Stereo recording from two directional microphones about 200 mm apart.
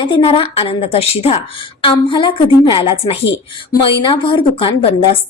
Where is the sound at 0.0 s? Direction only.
25° left (ahead or behind).